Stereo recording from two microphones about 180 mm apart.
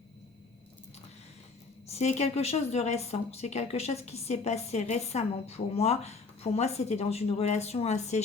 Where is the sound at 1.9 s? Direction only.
40° left (ahead or behind).